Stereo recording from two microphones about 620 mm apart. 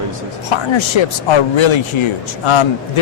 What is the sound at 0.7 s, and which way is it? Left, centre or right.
Speech, left.